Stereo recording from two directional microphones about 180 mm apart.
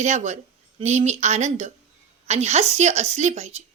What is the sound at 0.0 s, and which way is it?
A woman's voice, 40° right (ahead or behind).